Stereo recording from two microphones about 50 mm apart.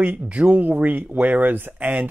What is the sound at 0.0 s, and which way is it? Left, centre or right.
Speech, right.